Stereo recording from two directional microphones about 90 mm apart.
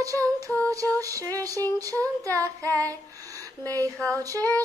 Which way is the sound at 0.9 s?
40° right (ahead or behind).